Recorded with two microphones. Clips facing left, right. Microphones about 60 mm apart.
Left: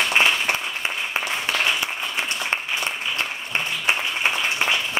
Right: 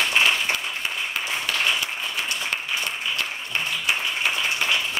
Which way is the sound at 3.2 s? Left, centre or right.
Centre.